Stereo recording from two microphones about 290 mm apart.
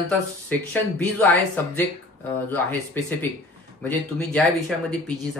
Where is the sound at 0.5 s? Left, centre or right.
Centre.